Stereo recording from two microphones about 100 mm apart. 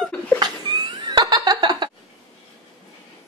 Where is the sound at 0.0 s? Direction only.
15° left (ahead or behind).